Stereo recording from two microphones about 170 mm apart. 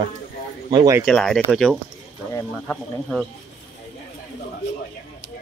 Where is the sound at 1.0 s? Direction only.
5° left (ahead or behind).